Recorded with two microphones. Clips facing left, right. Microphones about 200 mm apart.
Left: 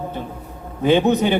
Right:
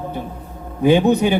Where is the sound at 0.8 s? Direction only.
15° right (ahead or behind).